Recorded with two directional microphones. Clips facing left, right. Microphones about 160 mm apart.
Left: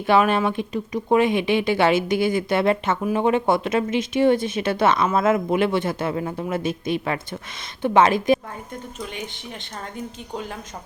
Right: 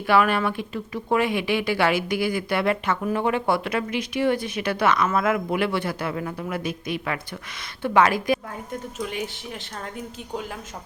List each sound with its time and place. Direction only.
0.1 s speech: 20° left (ahead or behind)
9.0 s speech: 5° right (ahead or behind)